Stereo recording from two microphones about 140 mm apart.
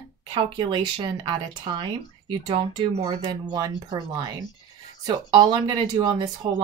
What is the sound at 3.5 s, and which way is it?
Speech, 30° right (ahead or behind).